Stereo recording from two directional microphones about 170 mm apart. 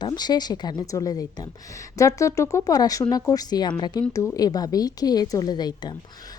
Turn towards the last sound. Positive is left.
turn(degrees=25)  # may be behind; listen again after turning